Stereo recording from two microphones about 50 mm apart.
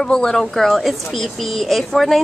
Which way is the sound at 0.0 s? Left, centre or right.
Centre.